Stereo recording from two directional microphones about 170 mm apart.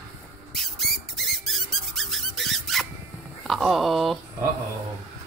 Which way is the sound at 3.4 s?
Centre (ahead or behind).